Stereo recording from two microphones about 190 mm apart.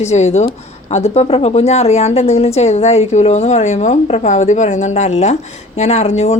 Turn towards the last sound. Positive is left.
turn(degrees=35)  # may be behind; listen again after turning